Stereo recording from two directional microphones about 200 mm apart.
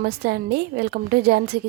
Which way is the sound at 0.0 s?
50° right (ahead or behind).